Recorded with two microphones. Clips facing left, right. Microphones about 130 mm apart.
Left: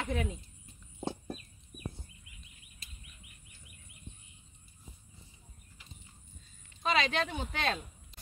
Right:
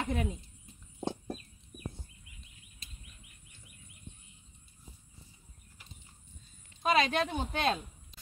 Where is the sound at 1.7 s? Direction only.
25° right (ahead or behind).